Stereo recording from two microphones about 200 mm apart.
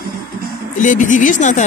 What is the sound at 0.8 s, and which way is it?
Speech, 40° left (ahead or behind).